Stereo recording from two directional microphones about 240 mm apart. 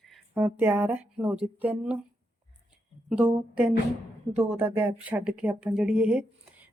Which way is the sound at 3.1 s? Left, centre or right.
Centre.